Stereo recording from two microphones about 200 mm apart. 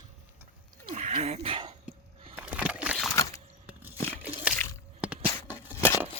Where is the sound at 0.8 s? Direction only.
35° right (ahead or behind).